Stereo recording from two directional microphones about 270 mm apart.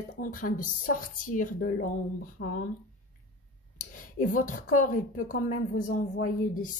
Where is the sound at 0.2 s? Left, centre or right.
Left.